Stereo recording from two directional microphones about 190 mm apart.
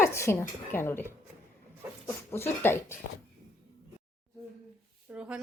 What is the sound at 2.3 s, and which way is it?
Speech, 10° left (ahead or behind).